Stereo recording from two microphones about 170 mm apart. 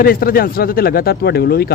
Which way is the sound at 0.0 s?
60° left (ahead or behind).